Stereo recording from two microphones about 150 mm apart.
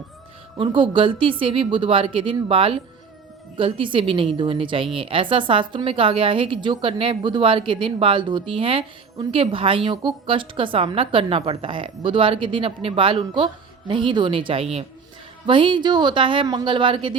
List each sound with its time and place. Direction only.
0.5 s a woman's voice: 35° right (ahead or behind)